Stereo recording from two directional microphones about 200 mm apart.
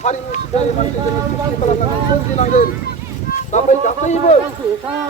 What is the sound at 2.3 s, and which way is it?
Speech, 40° left (ahead or behind).